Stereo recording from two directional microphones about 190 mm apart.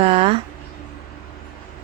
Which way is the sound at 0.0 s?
30° right (ahead or behind).